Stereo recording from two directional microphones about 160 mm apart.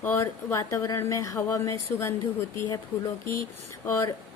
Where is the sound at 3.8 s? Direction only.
15° left (ahead or behind).